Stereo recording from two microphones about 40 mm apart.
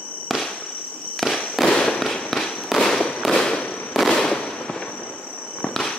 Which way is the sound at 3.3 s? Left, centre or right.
Centre.